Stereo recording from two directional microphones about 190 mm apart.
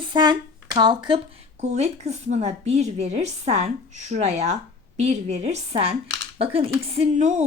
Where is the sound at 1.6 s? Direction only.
35° right (ahead or behind).